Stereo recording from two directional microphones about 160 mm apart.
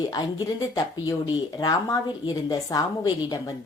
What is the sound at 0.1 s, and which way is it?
Speech, 25° left (ahead or behind).